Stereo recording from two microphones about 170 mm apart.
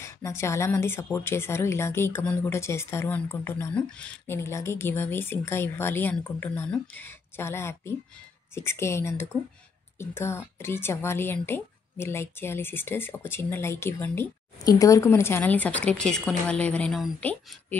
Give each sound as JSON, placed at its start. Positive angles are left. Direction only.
{"t": 0.0, "sound": "speech", "side_deg": 15}